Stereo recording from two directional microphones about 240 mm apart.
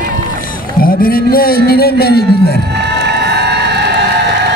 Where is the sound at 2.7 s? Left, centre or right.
Right.